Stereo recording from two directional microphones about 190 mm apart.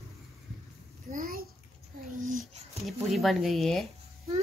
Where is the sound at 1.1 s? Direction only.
50° right (ahead or behind).